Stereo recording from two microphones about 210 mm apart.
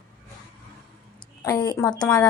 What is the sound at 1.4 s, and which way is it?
Speech, 20° left (ahead or behind).